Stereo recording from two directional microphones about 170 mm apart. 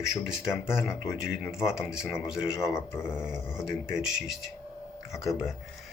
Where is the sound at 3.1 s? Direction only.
5° right (ahead or behind).